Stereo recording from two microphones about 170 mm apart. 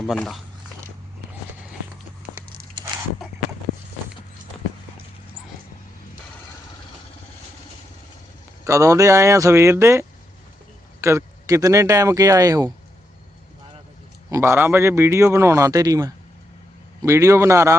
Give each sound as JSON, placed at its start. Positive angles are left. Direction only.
{"t": 0.0, "sound": "speech", "side_deg": 5}
{"t": 8.6, "sound": "a man's voice", "side_deg": -20}
{"t": 14.3, "sound": "a man's voice", "side_deg": -15}